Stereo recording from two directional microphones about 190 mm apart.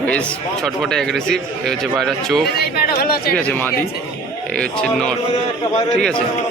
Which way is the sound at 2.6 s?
55° left (ahead or behind).